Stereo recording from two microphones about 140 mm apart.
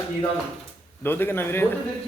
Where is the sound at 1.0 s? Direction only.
15° left (ahead or behind).